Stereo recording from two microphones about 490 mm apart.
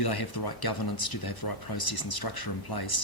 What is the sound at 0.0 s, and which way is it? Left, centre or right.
Speech, left.